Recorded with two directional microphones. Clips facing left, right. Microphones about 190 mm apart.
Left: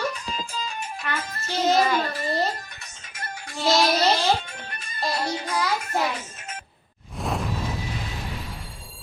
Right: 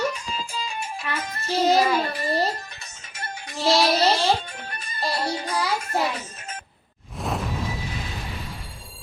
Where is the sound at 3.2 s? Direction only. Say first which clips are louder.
Right 1 dB; 20° right (ahead or behind).